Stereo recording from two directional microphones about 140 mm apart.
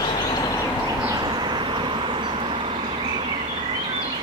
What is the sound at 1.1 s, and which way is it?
Vehicle, 30° right (ahead or behind).